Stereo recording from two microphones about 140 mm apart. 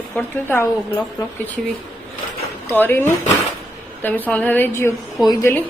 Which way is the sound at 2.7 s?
15° left (ahead or behind).